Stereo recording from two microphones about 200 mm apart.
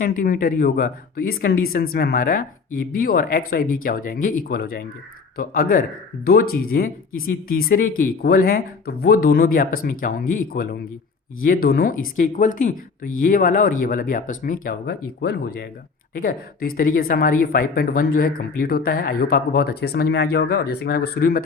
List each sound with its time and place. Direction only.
0.0 s speech: 40° left (ahead or behind)